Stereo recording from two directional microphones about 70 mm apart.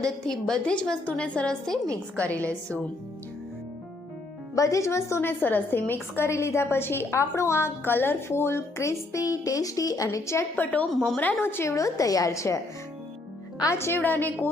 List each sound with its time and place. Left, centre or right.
0.0 s a woman's voice: centre
2.1 s a woman's voice: centre
4.5 s a woman's voice: left
10.6 s a woman's voice: left
10.9 s a woman's voice: centre
11.3 s a woman's voice: left
13.7 s a woman's voice: left
14.0 s a woman's voice: left